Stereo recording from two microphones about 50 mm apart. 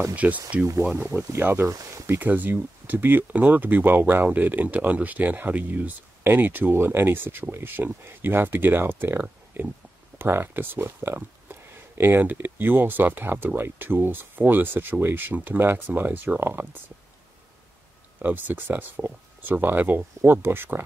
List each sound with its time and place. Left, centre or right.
0.1 s speech: right
0.9 s speech: right
1.4 s speech: right
2.1 s speech: right
16.3 s speech: right
18.2 s speech: right